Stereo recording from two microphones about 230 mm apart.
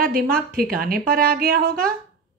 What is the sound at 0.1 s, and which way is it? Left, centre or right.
A woman's voice, right.